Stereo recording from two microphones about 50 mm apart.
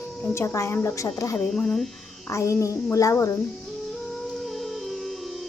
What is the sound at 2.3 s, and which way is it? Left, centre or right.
Speech, left.